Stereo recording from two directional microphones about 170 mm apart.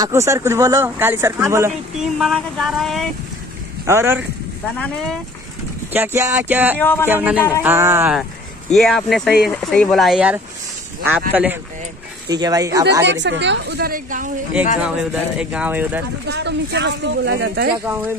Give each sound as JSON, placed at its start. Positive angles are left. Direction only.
{"t": 0.0, "sound": "speech", "side_deg": -15}
{"t": 2.0, "sound": "a sound", "side_deg": 0}
{"t": 3.8, "sound": "speech", "side_deg": -15}
{"t": 5.9, "sound": "speech", "side_deg": -15}
{"t": 6.8, "sound": "speech", "side_deg": 10}
{"t": 7.1, "sound": "speech", "side_deg": -10}
{"t": 8.1, "sound": "speech", "side_deg": 0}
{"t": 9.5, "sound": "a sound", "side_deg": 5}
{"t": 11.1, "sound": "speech", "side_deg": -10}
{"t": 12.3, "sound": "speech", "side_deg": -25}
{"t": 13.0, "sound": "a woman's voice", "side_deg": -90}
{"t": 14.8, "sound": "speech", "side_deg": -5}
{"t": 16.3, "sound": "speech", "side_deg": -80}